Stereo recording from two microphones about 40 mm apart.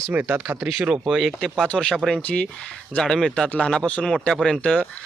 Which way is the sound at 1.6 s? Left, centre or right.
Left.